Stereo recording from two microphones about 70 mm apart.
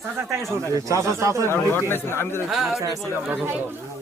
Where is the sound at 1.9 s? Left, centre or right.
Left.